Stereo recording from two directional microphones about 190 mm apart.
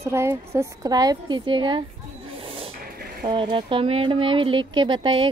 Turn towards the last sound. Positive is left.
turn(degrees=-25)  # may be behind; listen again after turning